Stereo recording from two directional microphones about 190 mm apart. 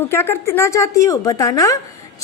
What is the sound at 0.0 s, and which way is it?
A woman's voice, 10° left (ahead or behind).